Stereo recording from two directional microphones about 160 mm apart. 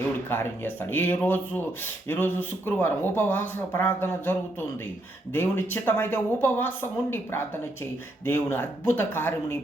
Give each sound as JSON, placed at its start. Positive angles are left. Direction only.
{"t": 0.3, "sound": "speech", "side_deg": 15}